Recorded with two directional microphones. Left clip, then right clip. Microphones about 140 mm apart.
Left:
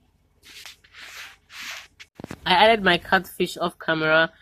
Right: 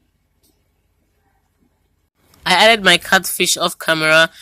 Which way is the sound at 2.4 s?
25° right (ahead or behind).